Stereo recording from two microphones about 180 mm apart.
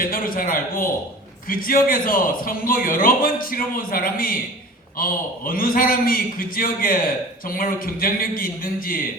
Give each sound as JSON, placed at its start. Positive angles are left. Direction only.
{"t": 0.0, "sound": "a man's voice", "side_deg": 50}